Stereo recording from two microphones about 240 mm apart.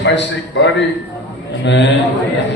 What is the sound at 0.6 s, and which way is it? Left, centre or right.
Speech, left.